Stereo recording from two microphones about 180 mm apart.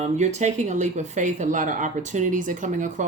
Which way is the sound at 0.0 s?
40° right (ahead or behind).